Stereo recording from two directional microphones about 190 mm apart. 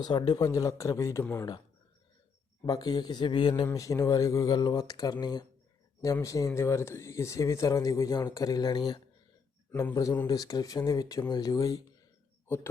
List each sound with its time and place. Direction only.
0.0 s speech: 25° left (ahead or behind)
2.6 s speech: 20° left (ahead or behind)